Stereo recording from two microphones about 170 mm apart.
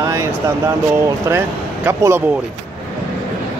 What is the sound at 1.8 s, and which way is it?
Speech, 15° right (ahead or behind).